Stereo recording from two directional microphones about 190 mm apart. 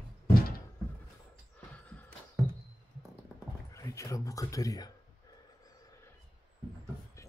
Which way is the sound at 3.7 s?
15° left (ahead or behind).